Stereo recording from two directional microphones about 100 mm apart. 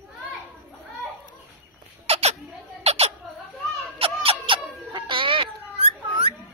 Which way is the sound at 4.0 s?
70° right (ahead or behind).